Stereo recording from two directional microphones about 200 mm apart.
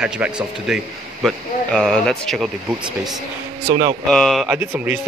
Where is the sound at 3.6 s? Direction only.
15° right (ahead or behind).